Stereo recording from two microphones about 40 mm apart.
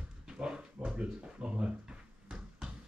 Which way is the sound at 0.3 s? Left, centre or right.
Centre.